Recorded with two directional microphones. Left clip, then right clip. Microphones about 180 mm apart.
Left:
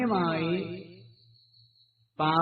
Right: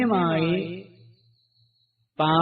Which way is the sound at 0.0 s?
25° right (ahead or behind).